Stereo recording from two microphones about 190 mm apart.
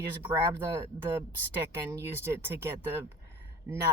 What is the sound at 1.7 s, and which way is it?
Speech, 15° right (ahead or behind).